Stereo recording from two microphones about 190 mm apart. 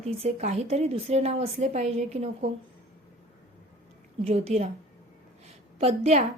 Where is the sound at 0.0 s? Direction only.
35° right (ahead or behind).